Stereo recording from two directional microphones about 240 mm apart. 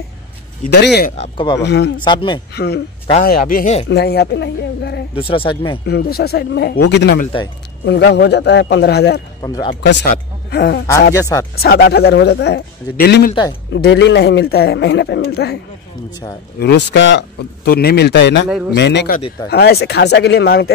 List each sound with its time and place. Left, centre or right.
1.1 s speech: left
1.6 s speech: left
2.0 s speech: centre
2.5 s speech: left
5.1 s speech: left
5.9 s speech: left
9.4 s speech: centre
10.1 s speech: left
11.1 s speech: centre
11.5 s speech: left
16.5 s speech: left
18.5 s a man's voice: centre
18.8 s speech: left